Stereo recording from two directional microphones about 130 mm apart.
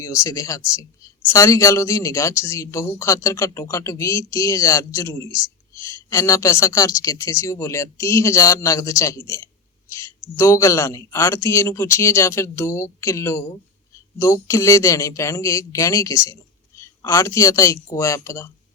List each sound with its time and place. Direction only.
0.0 s speech: 25° left (ahead or behind)